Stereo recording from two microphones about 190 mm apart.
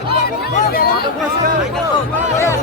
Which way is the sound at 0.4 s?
45° left (ahead or behind).